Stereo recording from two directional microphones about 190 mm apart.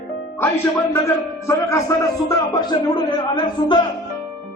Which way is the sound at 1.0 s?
15° left (ahead or behind).